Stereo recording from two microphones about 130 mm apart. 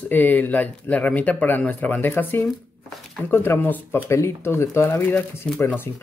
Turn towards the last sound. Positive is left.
turn(degrees=15)  # may be behind; listen again after turning